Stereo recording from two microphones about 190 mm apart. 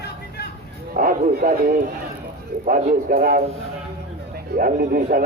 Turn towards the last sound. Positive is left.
turn(degrees=-45)  # may be behind; listen again after turning